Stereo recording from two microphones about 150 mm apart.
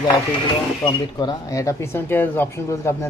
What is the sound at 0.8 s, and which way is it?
Speech, 30° left (ahead or behind).